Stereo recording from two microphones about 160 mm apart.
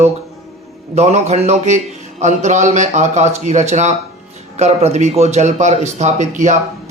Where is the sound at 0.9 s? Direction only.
45° right (ahead or behind).